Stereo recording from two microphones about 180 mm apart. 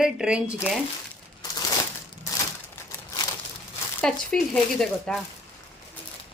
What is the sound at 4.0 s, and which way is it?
Speech, 5° left (ahead or behind).